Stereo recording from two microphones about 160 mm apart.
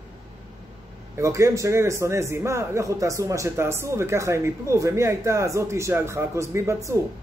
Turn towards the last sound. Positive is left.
turn(degrees=-20)  # may be behind; listen again after turning